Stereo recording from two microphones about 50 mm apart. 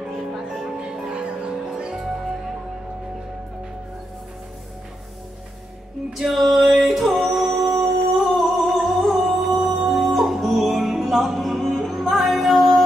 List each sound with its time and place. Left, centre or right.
0.0 s music: centre
6.1 s music: centre